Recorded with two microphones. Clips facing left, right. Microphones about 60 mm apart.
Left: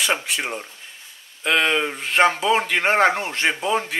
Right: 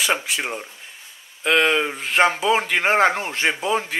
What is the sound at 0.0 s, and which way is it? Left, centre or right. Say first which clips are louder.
Speech: even; centre.